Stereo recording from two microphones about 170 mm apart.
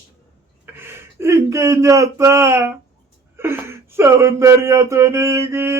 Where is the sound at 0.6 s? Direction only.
15° right (ahead or behind).